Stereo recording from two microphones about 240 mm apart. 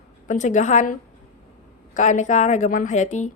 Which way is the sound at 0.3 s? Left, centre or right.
Left.